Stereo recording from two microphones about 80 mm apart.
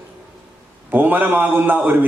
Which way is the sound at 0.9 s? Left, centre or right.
Right.